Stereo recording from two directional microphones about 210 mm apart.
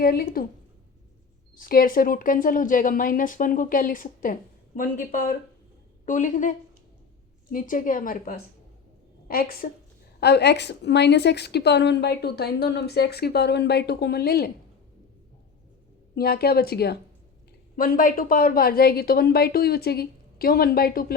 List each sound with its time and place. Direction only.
0.0 s a woman's voice: 45° left (ahead or behind)
1.5 s speech: 45° left (ahead or behind)
7.5 s a woman's voice: 40° left (ahead or behind)
16.1 s a woman's voice: 45° left (ahead or behind)